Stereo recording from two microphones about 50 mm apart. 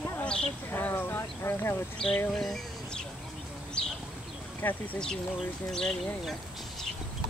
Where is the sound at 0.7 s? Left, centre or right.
Left.